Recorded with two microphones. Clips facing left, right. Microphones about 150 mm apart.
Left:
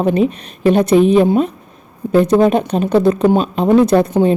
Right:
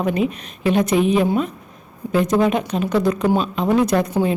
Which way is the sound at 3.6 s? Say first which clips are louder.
Left 8 dB; 30° left (ahead or behind).